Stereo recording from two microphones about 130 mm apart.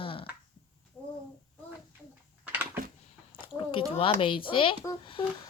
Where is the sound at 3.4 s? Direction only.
40° left (ahead or behind).